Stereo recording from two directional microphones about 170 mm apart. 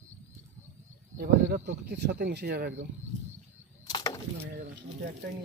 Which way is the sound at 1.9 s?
70° right (ahead or behind).